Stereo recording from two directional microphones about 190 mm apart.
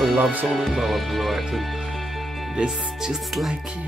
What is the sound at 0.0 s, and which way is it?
Speech, centre (ahead or behind).